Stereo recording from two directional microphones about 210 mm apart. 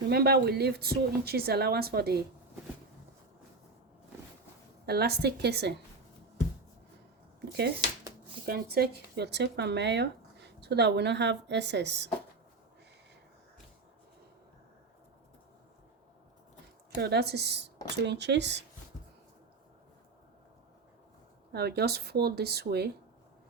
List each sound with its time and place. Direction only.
0.1 s speech: 50° right (ahead or behind)
4.9 s speech: 50° right (ahead or behind)
8.4 s speech: 50° right (ahead or behind)
17.0 s speech: 50° right (ahead or behind)
21.5 s speech: 50° right (ahead or behind)